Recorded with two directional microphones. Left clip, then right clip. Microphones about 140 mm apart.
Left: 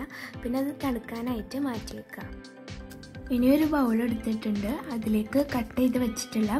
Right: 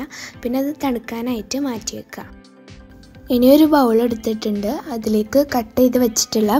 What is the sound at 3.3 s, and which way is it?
A woman's voice, 50° right (ahead or behind).